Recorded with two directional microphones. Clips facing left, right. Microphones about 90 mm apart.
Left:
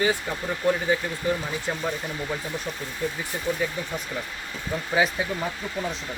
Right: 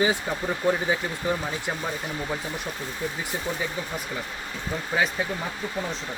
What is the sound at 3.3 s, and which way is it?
Speech, 10° right (ahead or behind).